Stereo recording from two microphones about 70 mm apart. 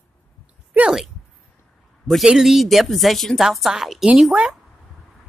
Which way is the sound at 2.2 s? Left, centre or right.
Centre.